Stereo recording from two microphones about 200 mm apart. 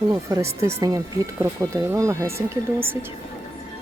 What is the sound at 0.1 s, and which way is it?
Speech, 15° right (ahead or behind).